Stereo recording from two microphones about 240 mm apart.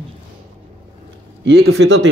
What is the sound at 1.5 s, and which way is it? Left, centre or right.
Speech, right.